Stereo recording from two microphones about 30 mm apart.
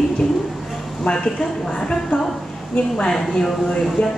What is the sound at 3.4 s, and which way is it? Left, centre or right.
Speech, centre.